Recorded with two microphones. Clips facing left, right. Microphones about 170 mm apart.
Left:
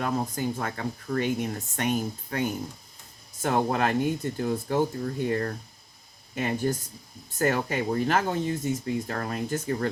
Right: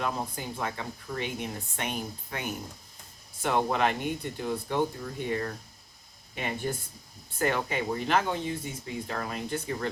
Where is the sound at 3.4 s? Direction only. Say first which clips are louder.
Left 2 dB; 45° left (ahead or behind).